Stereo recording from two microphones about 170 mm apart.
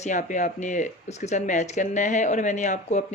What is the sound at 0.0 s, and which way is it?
Speech, 45° left (ahead or behind).